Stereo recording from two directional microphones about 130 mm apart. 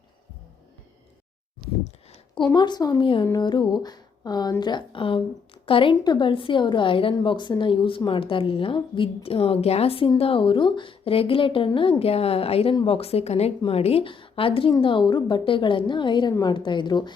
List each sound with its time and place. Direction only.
2.6 s a woman's voice: 35° left (ahead or behind)